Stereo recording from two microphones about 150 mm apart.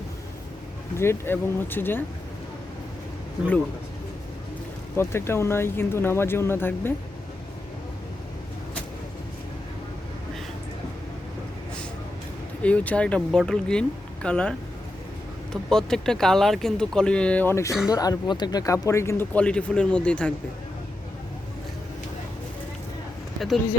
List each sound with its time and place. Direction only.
0.9 s speech: 15° left (ahead or behind)
4.9 s speech: 15° left (ahead or behind)
12.6 s speech: 10° left (ahead or behind)
15.7 s speech: 5° left (ahead or behind)
23.4 s speech: centre (ahead or behind)